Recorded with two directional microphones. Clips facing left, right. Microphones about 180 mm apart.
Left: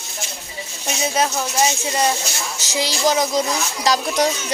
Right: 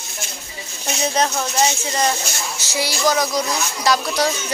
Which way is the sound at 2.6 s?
15° left (ahead or behind).